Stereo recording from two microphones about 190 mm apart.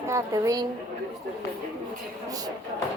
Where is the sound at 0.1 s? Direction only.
15° right (ahead or behind).